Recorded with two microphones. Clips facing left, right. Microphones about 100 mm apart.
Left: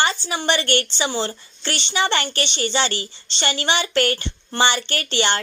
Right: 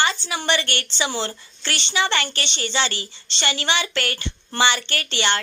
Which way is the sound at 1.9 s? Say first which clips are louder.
Left 1 dB; 35° left (ahead or behind).